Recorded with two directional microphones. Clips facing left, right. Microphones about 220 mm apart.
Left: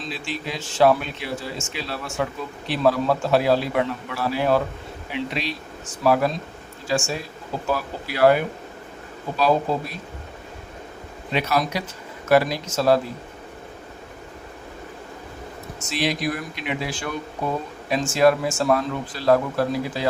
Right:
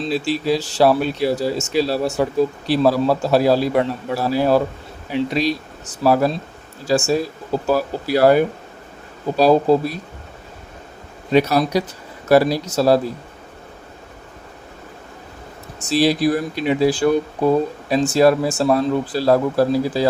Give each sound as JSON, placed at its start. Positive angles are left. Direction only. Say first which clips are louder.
{"t": 0.0, "sound": "speech", "louder": "right 10 dB", "side_deg": -35}
{"t": 11.3, "sound": "speech", "louder": "right 7 dB", "side_deg": -40}
{"t": 15.8, "sound": "speech", "louder": "right 8 dB", "side_deg": -35}